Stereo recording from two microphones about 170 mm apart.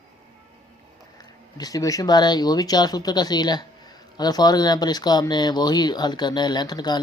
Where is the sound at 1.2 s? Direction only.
20° left (ahead or behind).